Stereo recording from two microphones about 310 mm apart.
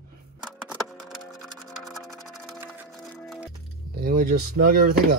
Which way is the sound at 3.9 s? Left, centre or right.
Right.